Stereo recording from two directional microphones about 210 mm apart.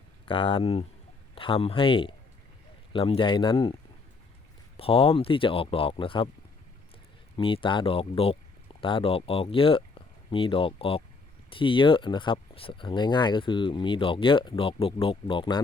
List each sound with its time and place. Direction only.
0.3 s speech: 25° left (ahead or behind)
4.8 s speech: 25° left (ahead or behind)
7.3 s speech: 25° left (ahead or behind)